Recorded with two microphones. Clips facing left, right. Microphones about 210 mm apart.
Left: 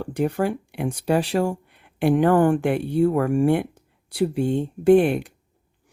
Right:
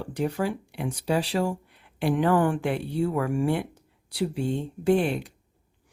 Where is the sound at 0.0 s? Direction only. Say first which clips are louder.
Left 4 dB; 55° left (ahead or behind).